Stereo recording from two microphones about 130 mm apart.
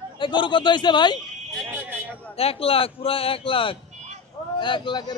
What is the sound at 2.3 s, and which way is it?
A man's voice, 50° left (ahead or behind).